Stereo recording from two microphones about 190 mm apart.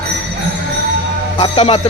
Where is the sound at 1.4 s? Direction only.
30° left (ahead or behind).